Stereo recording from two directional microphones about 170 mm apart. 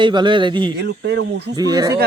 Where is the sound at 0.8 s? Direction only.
90° right.